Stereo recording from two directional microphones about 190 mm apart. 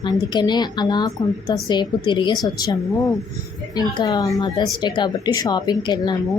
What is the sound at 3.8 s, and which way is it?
A woman's voice, 20° left (ahead or behind).